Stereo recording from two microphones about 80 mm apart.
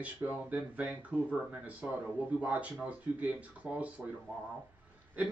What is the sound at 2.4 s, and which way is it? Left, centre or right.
Speech, centre.